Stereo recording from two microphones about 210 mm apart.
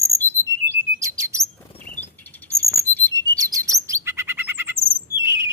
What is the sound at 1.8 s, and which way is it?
Chirp, 40° left (ahead or behind).